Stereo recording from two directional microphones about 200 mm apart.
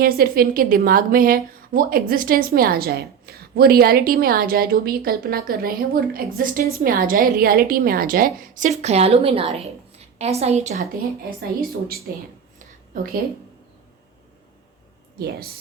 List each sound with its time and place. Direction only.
0.0 s a woman's voice: 50° right (ahead or behind)
8.8 s a woman's voice: 30° right (ahead or behind)